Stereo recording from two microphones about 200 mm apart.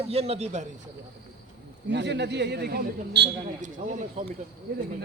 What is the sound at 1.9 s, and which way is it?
A man's voice, 60° right (ahead or behind).